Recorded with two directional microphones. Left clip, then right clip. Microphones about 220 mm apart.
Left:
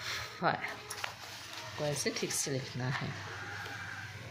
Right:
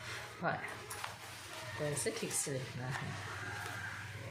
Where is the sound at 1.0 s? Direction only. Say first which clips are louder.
Left 6 dB; 40° left (ahead or behind).